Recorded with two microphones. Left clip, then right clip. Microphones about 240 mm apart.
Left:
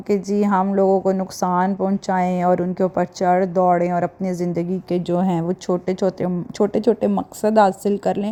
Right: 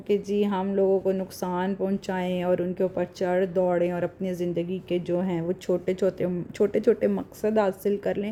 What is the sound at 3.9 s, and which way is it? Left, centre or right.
Speech, left.